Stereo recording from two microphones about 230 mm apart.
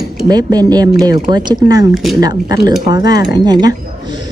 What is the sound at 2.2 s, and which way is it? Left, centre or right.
Speech, centre.